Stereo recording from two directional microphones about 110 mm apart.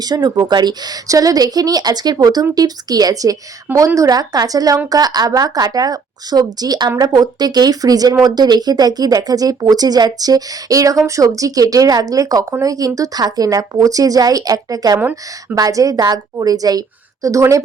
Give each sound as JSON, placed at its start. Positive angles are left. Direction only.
{"t": 0.0, "sound": "speech", "side_deg": -35}
{"t": 14.9, "sound": "a woman's voice", "side_deg": -20}
{"t": 15.5, "sound": "a woman's voice", "side_deg": -30}